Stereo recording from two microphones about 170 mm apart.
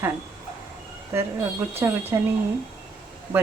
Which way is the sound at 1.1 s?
15° right (ahead or behind).